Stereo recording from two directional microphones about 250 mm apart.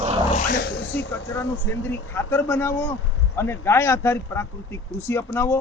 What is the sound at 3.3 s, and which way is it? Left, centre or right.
Speech, centre.